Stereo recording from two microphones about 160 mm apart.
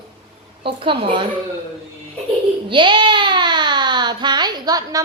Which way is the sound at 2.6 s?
30° right (ahead or behind).